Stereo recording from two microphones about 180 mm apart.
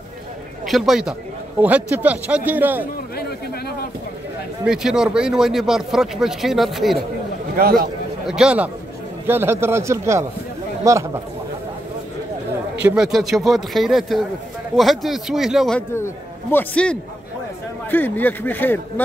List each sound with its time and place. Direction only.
0.7 s a man's voice: centre (ahead or behind)
4.6 s speech: 5° right (ahead or behind)
7.5 s a man's voice: 55° right (ahead or behind)
8.3 s a man's voice: 5° right (ahead or behind)
12.7 s speech: 5° right (ahead or behind)
15.9 s speech: 15° left (ahead or behind)